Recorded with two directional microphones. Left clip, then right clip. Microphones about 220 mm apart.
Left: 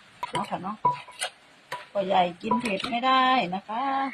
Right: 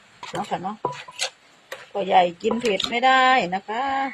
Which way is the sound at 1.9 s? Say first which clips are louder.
Right 5 dB; 45° right (ahead or behind).